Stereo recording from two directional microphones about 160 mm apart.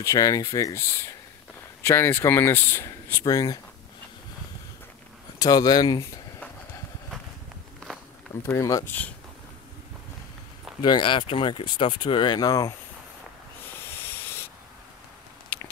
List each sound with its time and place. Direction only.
0.0 s speech: 20° left (ahead or behind)
5.4 s speech: 25° left (ahead or behind)
8.5 s speech: 20° left (ahead or behind)
10.8 s speech: 30° left (ahead or behind)
15.5 s a sound: 10° left (ahead or behind)